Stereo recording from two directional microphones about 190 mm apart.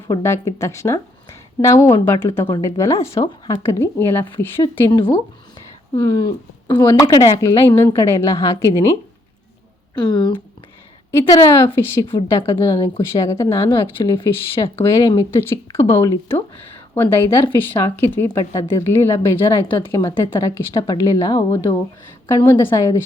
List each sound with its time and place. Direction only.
0.1 s a woman's voice: 15° left (ahead or behind)
4.9 s speech: 25° left (ahead or behind)
7.5 s a woman's voice: 30° left (ahead or behind)
7.8 s speech: 15° left (ahead or behind)
9.9 s speech: 25° left (ahead or behind)
12.4 s speech: 30° left (ahead or behind)
13.1 s speech: 15° left (ahead or behind)
13.7 s speech: 25° left (ahead or behind)
14.6 s speech: 15° left (ahead or behind)